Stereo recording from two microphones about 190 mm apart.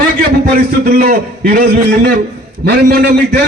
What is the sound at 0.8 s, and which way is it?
Speech, 50° right (ahead or behind).